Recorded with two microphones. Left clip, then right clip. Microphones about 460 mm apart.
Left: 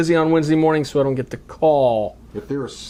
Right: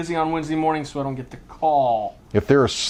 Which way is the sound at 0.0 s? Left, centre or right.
Left.